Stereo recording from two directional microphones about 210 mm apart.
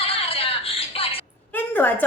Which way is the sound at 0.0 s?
25° left (ahead or behind).